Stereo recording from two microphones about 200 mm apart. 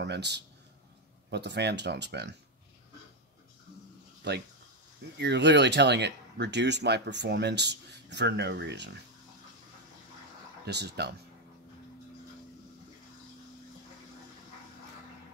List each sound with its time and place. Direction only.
0.0 s speech: 60° right (ahead or behind)
4.2 s speech: 60° right (ahead or behind)
10.6 s speech: 55° right (ahead or behind)